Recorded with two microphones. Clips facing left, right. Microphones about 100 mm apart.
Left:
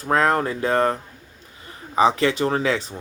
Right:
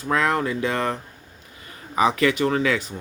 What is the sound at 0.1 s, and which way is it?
Speech, 40° left (ahead or behind).